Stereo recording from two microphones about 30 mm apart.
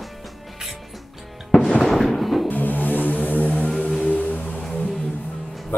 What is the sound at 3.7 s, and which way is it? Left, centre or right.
Music, centre.